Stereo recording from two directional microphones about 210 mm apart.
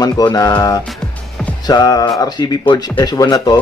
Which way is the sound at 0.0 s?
20° left (ahead or behind).